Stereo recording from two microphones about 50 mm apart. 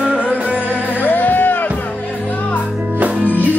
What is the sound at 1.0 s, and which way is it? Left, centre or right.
Music, left.